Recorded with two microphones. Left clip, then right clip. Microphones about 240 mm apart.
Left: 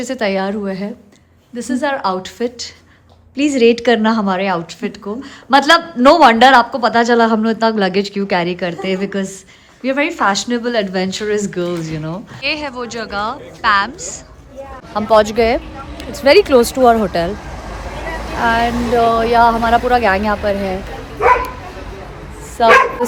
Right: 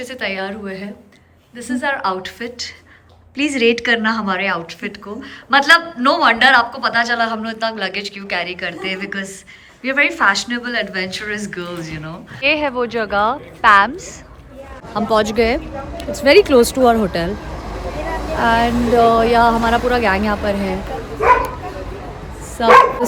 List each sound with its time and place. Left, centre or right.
0.0 s a woman's voice: left
12.4 s speech: centre
18.3 s speech: centre
22.6 s speech: centre